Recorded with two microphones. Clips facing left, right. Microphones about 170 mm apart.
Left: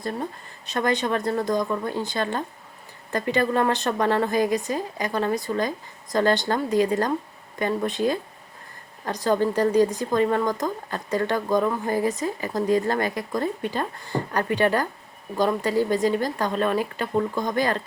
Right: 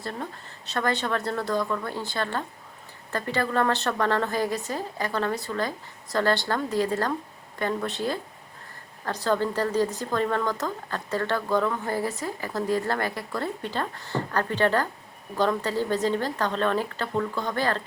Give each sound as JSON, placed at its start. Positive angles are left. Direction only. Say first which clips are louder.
{"t": 0.0, "sound": "speech", "louder": "left 4 dB", "side_deg": 15}